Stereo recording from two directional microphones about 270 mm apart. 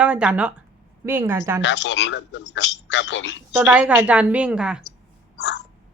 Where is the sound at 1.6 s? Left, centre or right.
Left.